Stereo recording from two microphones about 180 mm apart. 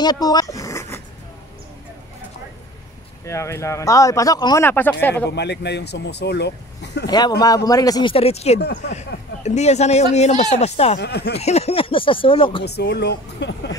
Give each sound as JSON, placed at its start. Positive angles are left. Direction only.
{"t": 0.0, "sound": "dog", "side_deg": 20}
{"t": 3.3, "sound": "speech", "side_deg": 15}
{"t": 4.6, "sound": "speech", "side_deg": 10}
{"t": 5.3, "sound": "speech", "side_deg": 70}
{"t": 7.1, "sound": "speech", "side_deg": 20}
{"t": 8.5, "sound": "speech", "side_deg": 65}
{"t": 8.9, "sound": "speech", "side_deg": 40}
{"t": 11.0, "sound": "speech", "side_deg": 65}
{"t": 11.3, "sound": "speech", "side_deg": 35}
{"t": 12.6, "sound": "speech", "side_deg": 65}